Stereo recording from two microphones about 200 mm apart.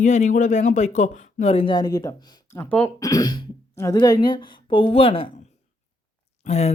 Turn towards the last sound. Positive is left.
turn(degrees=30)  # may be behind; listen again after turning